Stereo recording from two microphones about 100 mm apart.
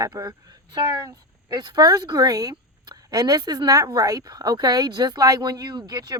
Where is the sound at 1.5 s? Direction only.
40° right (ahead or behind).